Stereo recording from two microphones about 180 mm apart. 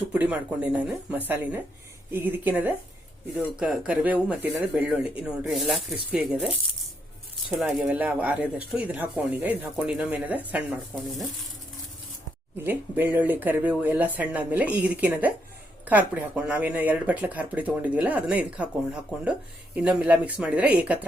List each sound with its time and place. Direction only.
0.1 s speech: 10° right (ahead or behind)
7.6 s speech: 5° right (ahead or behind)
12.6 s speech: 10° right (ahead or behind)